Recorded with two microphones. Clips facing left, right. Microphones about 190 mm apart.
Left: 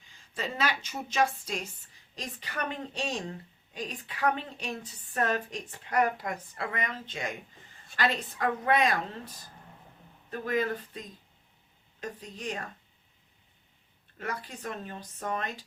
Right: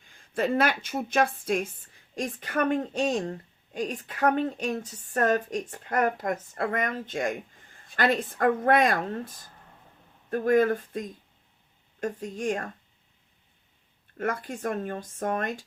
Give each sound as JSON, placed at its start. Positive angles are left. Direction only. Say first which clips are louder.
{"t": 0.0, "sound": "a woman's voice", "louder": "right 9 dB", "side_deg": -55}
{"t": 14.2, "sound": "a woman's voice", "louder": "right 7 dB", "side_deg": -50}